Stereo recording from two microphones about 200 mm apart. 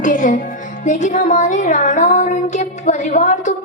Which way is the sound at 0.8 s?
40° left (ahead or behind).